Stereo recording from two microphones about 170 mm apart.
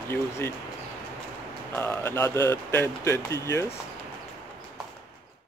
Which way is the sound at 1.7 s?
15° left (ahead or behind).